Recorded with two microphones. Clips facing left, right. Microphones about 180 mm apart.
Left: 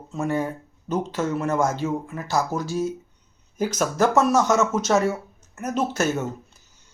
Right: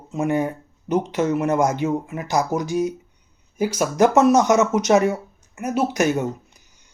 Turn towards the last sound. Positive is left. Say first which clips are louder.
# left 2 dB
turn(degrees=-15)  # may be behind; listen again after turning